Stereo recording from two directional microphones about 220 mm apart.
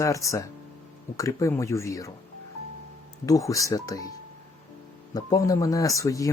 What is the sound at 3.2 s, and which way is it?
Speech, 15° left (ahead or behind).